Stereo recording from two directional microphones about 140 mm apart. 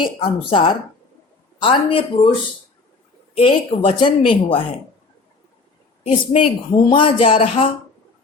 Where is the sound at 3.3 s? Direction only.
40° left (ahead or behind).